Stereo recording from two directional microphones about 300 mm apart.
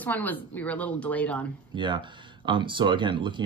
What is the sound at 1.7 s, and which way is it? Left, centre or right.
Speech, centre.